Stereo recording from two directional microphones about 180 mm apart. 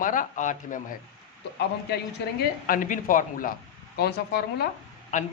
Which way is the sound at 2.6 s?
50° left (ahead or behind).